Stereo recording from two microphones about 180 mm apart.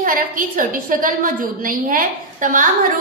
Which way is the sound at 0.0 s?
50° right (ahead or behind).